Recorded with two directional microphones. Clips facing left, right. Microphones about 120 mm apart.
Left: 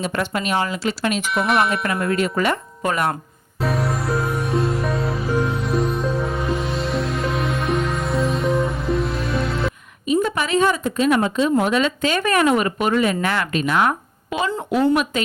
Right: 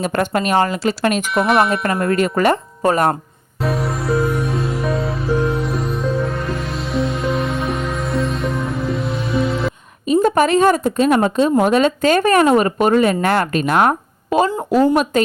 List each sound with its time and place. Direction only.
0.0 s speech: 50° right (ahead or behind)
1.3 s speech: centre (ahead or behind)
1.8 s speech: 45° right (ahead or behind)
3.6 s music: centre (ahead or behind)
10.1 s a woman's voice: 45° right (ahead or behind)